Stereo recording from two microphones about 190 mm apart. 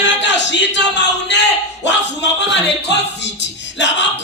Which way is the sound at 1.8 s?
65° left (ahead or behind).